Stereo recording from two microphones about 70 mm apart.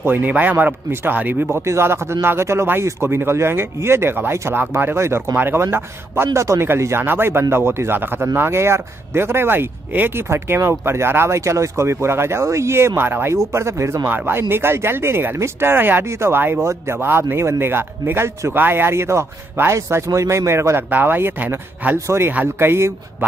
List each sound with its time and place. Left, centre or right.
0.0 s speech: right
21.9 s speech: right